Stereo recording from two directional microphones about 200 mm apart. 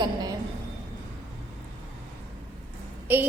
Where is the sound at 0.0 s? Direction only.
20° right (ahead or behind).